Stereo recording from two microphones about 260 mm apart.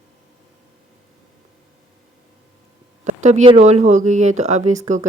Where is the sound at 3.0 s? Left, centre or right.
Right.